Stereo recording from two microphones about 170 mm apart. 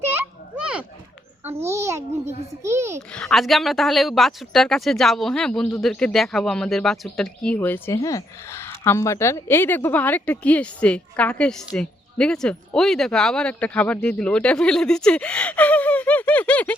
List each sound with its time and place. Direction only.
0.5 s a sound: 5° right (ahead or behind)
1.5 s a child's voice: 15° right (ahead or behind)
3.1 s a woman's voice: 5° left (ahead or behind)